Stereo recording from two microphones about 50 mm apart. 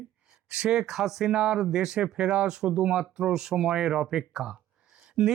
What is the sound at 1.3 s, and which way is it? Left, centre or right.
Speech, centre.